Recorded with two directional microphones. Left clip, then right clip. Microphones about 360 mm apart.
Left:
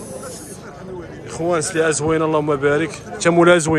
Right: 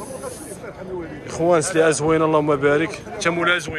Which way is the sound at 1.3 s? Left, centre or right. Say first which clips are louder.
Right 2 dB; centre.